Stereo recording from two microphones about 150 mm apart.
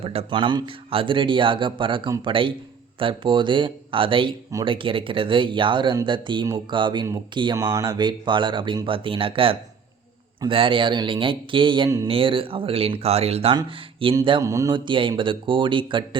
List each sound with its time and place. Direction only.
0.0 s speech: 40° right (ahead or behind)
14.4 s mantra: 20° right (ahead or behind)
14.8 s speech: 35° right (ahead or behind)